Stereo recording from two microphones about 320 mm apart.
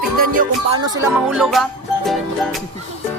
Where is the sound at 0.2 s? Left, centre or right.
Right.